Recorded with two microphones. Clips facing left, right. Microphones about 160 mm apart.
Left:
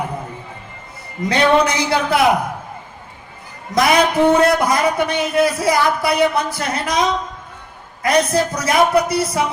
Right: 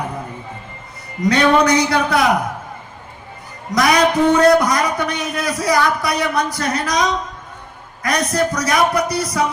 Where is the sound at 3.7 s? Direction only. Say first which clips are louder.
Even; 25° left (ahead or behind).